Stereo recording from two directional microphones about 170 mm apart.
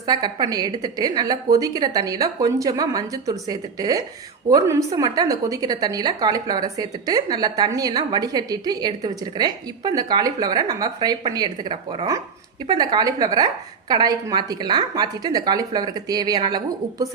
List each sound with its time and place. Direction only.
0.0 s a woman's voice: 25° right (ahead or behind)